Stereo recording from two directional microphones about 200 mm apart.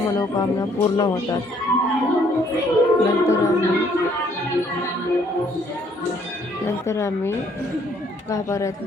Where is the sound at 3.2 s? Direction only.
15° left (ahead or behind).